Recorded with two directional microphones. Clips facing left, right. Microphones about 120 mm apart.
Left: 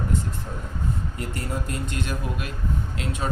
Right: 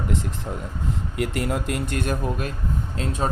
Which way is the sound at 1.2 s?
85° right.